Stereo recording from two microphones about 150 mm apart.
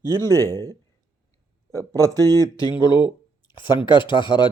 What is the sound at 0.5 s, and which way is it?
Speech, 25° right (ahead or behind).